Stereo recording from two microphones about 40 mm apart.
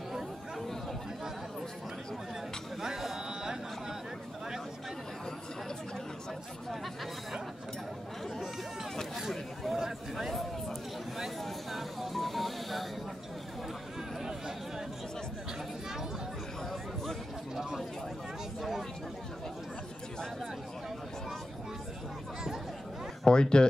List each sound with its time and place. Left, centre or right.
0.1 s chatter: centre
2.8 s a sound: centre
9.3 s a sound: centre
11.4 s vehicle: centre
18.6 s speech: centre
23.2 s speech: left